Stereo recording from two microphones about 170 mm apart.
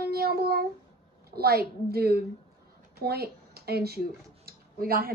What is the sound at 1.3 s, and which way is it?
Speech, 65° right (ahead or behind).